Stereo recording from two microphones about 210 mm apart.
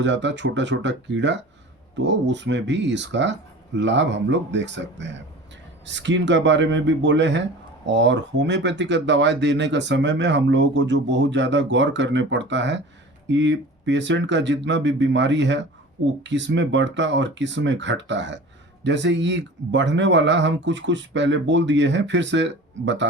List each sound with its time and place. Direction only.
0.0 s speech: 60° right (ahead or behind)